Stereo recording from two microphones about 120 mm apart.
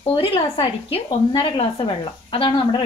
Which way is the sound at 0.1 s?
45° left (ahead or behind).